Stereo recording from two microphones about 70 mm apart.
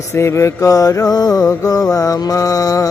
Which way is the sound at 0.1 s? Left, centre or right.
Left.